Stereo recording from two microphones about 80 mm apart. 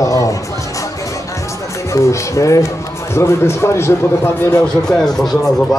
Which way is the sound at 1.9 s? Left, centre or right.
Left.